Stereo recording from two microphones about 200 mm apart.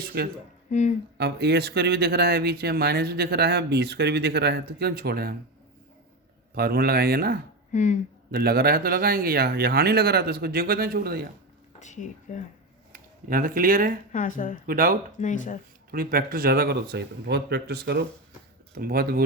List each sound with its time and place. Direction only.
0.0 s speech: 50° right (ahead or behind)
0.7 s speech: 35° left (ahead or behind)
1.2 s speech: 55° right (ahead or behind)
6.5 s speech: 50° right (ahead or behind)
7.7 s speech: 40° left (ahead or behind)
8.3 s speech: 50° right (ahead or behind)
11.8 s speech: 35° left (ahead or behind)
12.9 s speech: 45° right (ahead or behind)
14.1 s speech: 40° left (ahead or behind)
14.7 s speech: 45° right (ahead or behind)
15.2 s speech: 40° left (ahead or behind)
15.9 s speech: 50° right (ahead or behind)